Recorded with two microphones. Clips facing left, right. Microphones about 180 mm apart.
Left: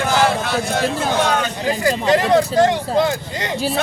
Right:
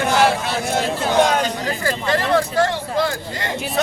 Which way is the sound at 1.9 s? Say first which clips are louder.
Left 4 dB; 20° left (ahead or behind).